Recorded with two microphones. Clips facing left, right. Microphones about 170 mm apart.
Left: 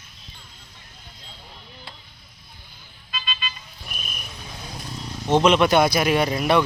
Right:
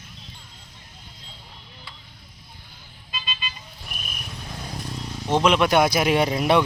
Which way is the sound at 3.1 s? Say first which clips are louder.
Left 2 dB; 15° right (ahead or behind).